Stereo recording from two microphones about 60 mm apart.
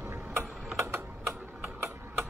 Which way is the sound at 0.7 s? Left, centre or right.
Right.